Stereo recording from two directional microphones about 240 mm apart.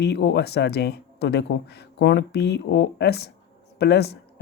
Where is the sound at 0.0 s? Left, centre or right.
Left.